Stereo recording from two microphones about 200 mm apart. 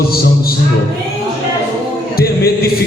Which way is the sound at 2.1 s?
50° left (ahead or behind).